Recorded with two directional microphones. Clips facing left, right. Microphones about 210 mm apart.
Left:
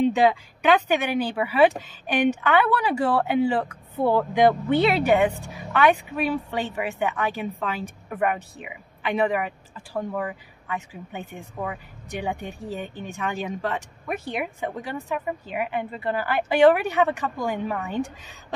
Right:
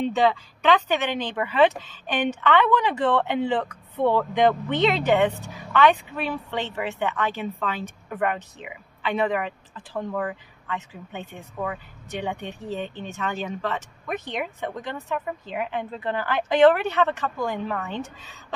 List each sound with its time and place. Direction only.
0.1 s speech: 10° left (ahead or behind)